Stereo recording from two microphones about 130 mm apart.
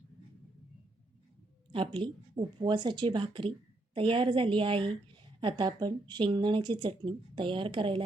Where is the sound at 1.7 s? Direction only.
35° right (ahead or behind).